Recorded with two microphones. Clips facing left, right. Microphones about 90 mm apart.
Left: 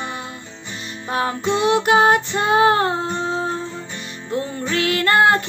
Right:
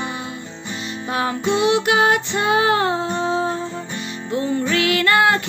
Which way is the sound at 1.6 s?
40° left (ahead or behind).